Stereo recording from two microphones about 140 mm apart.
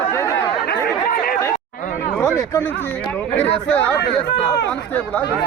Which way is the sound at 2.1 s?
20° left (ahead or behind).